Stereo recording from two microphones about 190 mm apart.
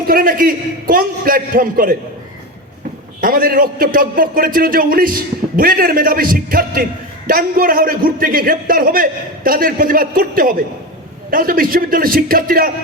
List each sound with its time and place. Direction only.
0.1 s a man's voice: 50° right (ahead or behind)
3.2 s a man's voice: 50° right (ahead or behind)